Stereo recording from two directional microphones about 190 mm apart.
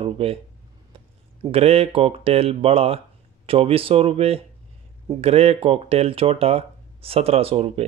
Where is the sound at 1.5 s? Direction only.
30° right (ahead or behind).